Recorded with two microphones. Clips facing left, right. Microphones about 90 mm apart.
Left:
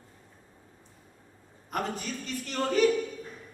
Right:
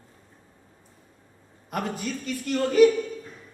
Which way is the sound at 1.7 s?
40° left (ahead or behind).